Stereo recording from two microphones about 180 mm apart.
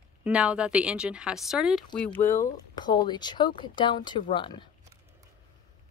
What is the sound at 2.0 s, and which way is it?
Speech, 10° left (ahead or behind).